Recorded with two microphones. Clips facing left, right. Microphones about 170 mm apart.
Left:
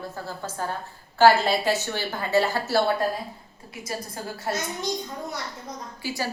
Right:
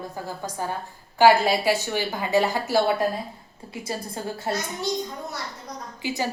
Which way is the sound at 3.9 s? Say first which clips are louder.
Right 2 dB; 25° right (ahead or behind).